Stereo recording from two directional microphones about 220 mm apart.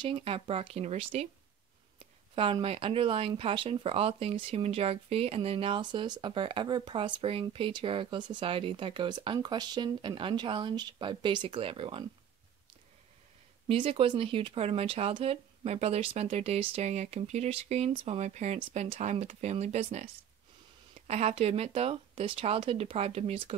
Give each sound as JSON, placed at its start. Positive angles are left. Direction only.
{"t": 0.0, "sound": "speech", "side_deg": -25}
{"t": 2.3, "sound": "speech", "side_deg": -25}
{"t": 13.7, "sound": "speech", "side_deg": -25}
{"t": 21.1, "sound": "speech", "side_deg": -30}